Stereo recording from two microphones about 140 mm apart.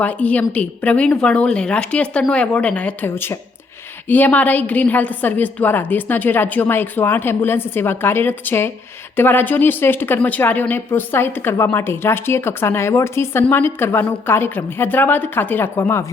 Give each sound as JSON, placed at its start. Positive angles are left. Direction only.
{"t": 0.0, "sound": "speech", "side_deg": 10}